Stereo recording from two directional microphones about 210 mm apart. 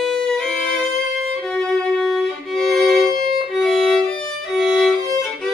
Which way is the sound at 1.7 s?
Centre (ahead or behind).